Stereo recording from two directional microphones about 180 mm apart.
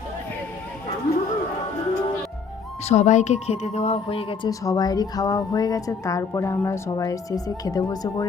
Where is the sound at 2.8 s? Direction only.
40° left (ahead or behind).